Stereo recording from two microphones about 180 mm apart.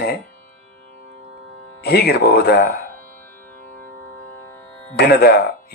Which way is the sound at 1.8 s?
65° left (ahead or behind).